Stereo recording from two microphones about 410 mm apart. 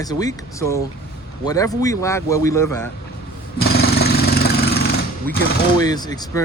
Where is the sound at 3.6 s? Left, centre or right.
Left.